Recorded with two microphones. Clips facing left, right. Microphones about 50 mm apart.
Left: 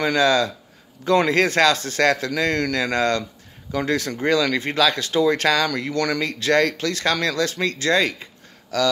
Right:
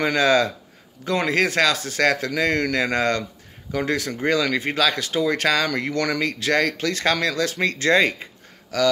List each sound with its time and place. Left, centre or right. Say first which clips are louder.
0.0 s speech: even; centre
1.0 s speech: left 3 dB; centre
5.7 s speech: even; right